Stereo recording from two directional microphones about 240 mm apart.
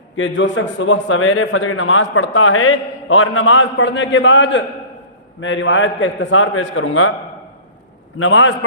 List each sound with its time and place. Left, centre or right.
0.2 s a man's voice: left
8.2 s a man's voice: left